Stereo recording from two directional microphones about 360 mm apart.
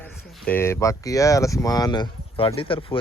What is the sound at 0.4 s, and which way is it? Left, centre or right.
Speech, centre.